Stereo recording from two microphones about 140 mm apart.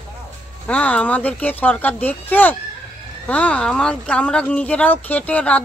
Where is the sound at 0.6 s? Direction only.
10° left (ahead or behind).